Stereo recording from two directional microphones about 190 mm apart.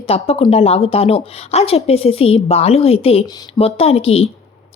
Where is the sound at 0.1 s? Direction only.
30° left (ahead or behind).